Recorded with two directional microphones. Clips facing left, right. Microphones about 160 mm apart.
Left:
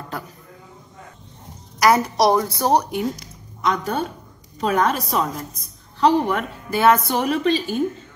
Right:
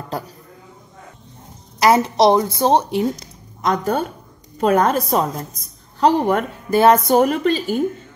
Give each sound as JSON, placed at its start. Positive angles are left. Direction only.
{"t": 1.8, "sound": "a woman's voice", "side_deg": -25}
{"t": 3.6, "sound": "a woman's voice", "side_deg": -45}